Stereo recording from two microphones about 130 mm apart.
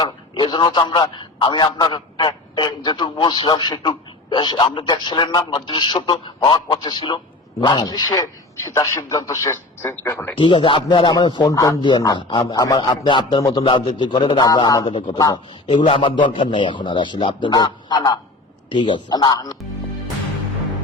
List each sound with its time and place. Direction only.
0.0 s a man's voice: 35° left (ahead or behind); by 10.3 s 15° left (ahead or behind)
10.3 s a man's voice: 40° left (ahead or behind)